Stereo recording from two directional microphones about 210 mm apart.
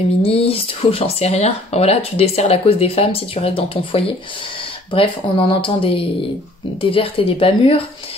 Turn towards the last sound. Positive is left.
turn(degrees=25)  # may be behind; listen again after turning